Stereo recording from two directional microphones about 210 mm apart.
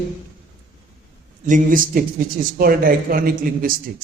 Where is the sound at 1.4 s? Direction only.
40° right (ahead or behind).